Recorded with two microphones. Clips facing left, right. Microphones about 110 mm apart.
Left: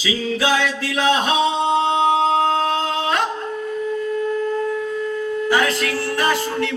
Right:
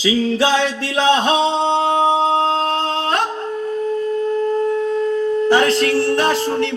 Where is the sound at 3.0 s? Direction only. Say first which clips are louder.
Right 1 dB; 50° right (ahead or behind).